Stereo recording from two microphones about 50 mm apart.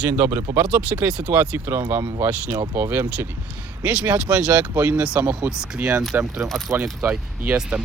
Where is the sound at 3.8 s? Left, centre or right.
Right.